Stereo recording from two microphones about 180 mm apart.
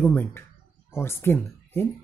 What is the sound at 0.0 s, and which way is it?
Speech, 10° left (ahead or behind).